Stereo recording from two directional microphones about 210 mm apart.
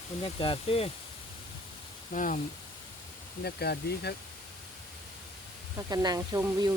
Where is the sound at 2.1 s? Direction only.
40° left (ahead or behind).